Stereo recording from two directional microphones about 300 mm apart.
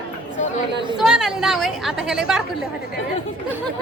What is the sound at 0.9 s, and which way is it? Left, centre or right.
A woman's voice, centre.